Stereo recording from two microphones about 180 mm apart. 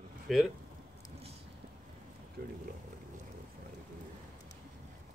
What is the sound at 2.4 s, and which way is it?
Speech, 60° right (ahead or behind).